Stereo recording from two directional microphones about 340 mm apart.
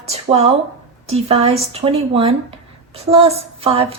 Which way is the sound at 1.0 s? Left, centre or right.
Centre.